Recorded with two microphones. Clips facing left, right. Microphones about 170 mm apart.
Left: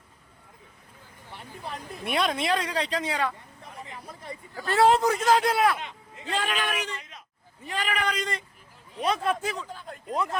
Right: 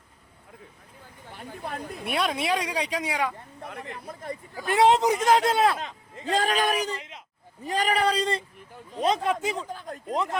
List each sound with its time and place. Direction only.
1.4 s a sound: 50° right (ahead or behind)
2.0 s speech: 5° right (ahead or behind)
3.6 s speech: 65° right (ahead or behind)
4.5 s speech: 15° right (ahead or behind)
5.8 s speech: 40° right (ahead or behind); by 9.6 s 20° right (ahead or behind)
9.6 s speech: 45° right (ahead or behind)